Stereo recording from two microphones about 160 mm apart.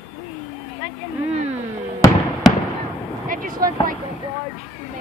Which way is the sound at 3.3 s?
60° right (ahead or behind).